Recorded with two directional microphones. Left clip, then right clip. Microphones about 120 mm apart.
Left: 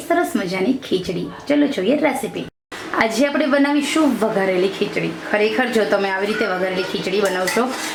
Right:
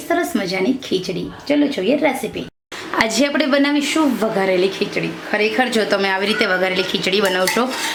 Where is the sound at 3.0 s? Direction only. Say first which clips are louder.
Right 1 dB; 40° right (ahead or behind).